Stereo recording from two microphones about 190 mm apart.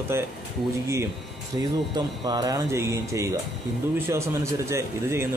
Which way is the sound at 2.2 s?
20° right (ahead or behind).